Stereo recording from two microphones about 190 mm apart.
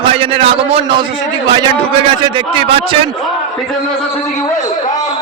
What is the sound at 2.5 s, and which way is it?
Speech, 25° right (ahead or behind).